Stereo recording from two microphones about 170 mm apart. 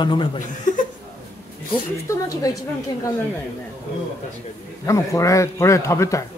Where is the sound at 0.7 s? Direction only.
50° left (ahead or behind).